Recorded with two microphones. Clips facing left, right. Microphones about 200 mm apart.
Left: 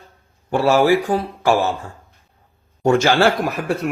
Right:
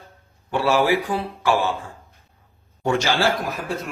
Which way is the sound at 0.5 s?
45° left (ahead or behind).